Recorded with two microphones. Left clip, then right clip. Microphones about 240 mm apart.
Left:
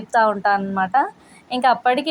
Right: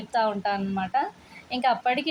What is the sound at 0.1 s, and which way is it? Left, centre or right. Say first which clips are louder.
A woman's voice: left 8 dB; centre.